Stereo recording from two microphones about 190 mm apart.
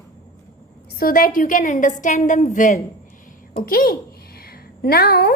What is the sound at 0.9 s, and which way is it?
A woman's voice, 50° left (ahead or behind).